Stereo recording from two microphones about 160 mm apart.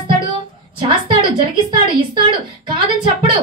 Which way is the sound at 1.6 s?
30° right (ahead or behind).